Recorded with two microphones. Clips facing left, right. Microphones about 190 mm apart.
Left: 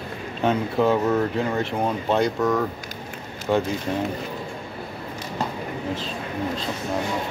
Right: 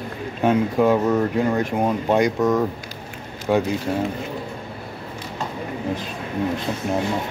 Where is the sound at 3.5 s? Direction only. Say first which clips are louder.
Right 2 dB; 5° right (ahead or behind).